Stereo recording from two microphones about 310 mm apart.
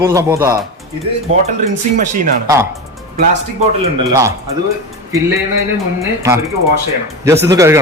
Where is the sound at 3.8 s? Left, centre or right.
Centre.